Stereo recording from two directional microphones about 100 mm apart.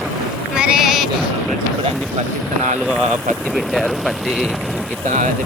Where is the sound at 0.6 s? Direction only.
10° right (ahead or behind).